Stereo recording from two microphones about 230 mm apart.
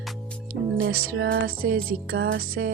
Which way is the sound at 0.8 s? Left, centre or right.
Right.